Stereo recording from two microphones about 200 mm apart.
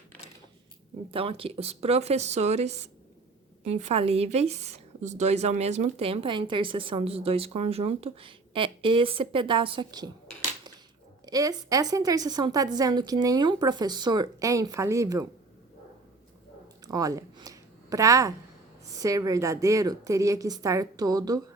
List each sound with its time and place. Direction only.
1.1 s a woman's voice: 30° right (ahead or behind)
11.3 s a woman's voice: 15° right (ahead or behind)
16.8 s a sound: 20° right (ahead or behind)
18.9 s a woman's voice: 15° right (ahead or behind)